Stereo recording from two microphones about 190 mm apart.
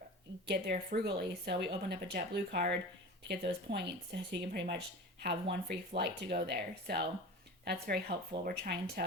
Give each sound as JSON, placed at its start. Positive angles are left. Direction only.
{"t": 0.4, "sound": "speech", "side_deg": -55}